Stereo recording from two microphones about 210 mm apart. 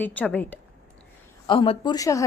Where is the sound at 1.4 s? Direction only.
25° left (ahead or behind).